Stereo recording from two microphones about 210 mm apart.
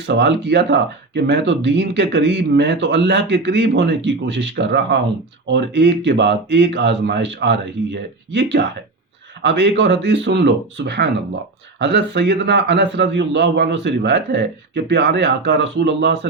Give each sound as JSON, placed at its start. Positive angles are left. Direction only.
{"t": 0.0, "sound": "speech", "side_deg": -55}